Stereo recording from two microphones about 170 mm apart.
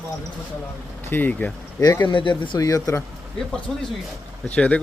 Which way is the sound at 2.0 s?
30° left (ahead or behind).